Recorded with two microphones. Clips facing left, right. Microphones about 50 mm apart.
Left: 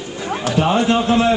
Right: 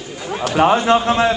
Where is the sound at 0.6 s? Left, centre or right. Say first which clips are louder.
Right 3 dB; right.